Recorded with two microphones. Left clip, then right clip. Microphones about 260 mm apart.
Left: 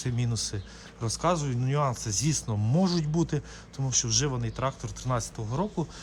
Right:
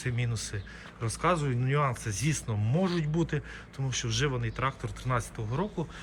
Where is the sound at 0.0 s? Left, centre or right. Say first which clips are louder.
Left 2 dB; centre.